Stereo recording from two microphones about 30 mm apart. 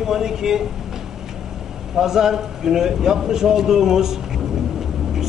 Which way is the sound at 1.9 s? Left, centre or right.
Centre.